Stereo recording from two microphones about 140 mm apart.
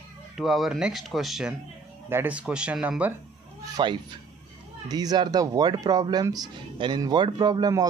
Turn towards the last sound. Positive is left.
turn(degrees=-30)  # may be behind; listen again after turning